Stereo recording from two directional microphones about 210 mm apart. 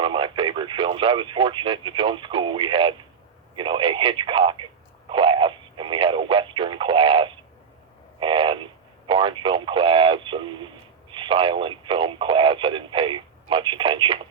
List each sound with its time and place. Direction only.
0.0 s speech: 25° right (ahead or behind)
8.2 s a sound: 25° right (ahead or behind)
9.0 s speech: 25° right (ahead or behind)